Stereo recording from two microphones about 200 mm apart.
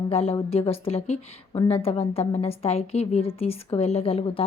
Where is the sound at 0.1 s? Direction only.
30° left (ahead or behind).